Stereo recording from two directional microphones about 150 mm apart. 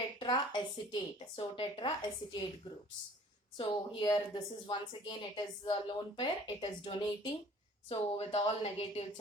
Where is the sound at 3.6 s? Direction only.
30° left (ahead or behind).